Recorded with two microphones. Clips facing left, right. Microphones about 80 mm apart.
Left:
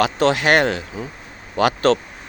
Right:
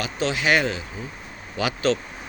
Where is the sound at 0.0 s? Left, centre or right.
Left.